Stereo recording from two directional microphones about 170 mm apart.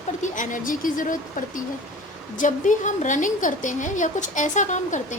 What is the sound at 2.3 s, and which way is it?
A woman's voice, 50° left (ahead or behind).